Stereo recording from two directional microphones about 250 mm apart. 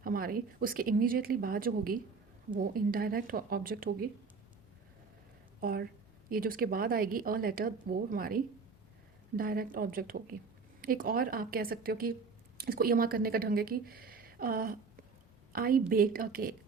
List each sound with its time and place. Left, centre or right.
0.0 s speech: right
5.5 s a woman's voice: right